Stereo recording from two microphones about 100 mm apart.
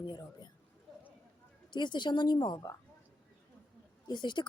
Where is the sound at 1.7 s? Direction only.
50° left (ahead or behind).